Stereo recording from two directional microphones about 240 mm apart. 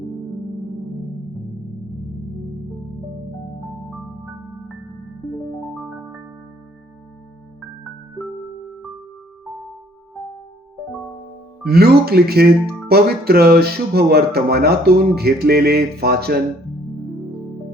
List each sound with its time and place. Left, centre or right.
11.6 s speech: right